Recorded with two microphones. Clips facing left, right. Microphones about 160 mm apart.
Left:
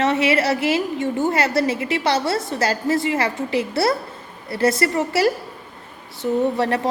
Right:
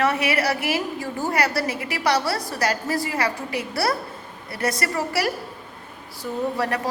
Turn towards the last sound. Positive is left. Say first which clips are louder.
# left 5 dB
turn(degrees=25)  # may be behind; listen again after turning